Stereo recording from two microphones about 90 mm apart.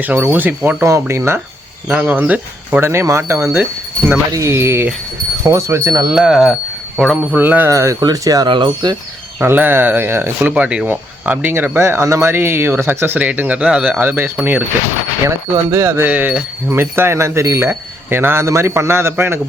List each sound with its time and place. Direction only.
0.0 s speech: 20° right (ahead or behind)
0.9 s speech: 30° right (ahead or behind)
1.9 s speech: 15° right (ahead or behind); by 6.1 s 35° right (ahead or behind)
6.1 s speech: 10° right (ahead or behind)
7.3 s speech: 20° right (ahead or behind)
7.7 s speech: 35° right (ahead or behind)
8.4 s speech: 65° right (ahead or behind)
9.4 s speech: 25° right (ahead or behind)
10.5 s speech: 15° right (ahead or behind)
14.0 s speech: 20° right (ahead or behind)
15.7 s speech: 30° right (ahead or behind)
16.0 s speech: 15° right (ahead or behind)